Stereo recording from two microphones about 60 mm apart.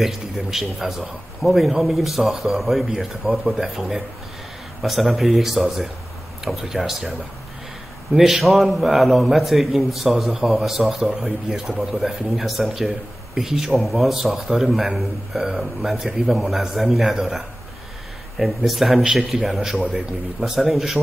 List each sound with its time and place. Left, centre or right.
0.0 s speech: centre
18.4 s speech: centre